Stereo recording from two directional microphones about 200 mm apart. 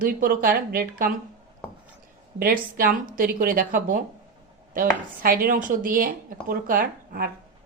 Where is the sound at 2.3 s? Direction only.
45° right (ahead or behind).